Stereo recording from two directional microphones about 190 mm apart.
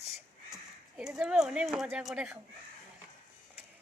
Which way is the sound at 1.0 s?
5° right (ahead or behind).